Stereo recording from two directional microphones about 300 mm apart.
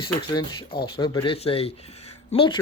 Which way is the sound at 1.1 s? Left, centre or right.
Centre.